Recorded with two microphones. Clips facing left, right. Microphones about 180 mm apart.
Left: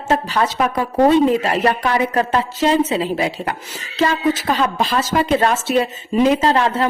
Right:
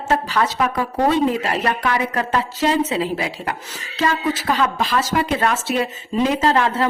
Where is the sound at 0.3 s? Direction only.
20° left (ahead or behind).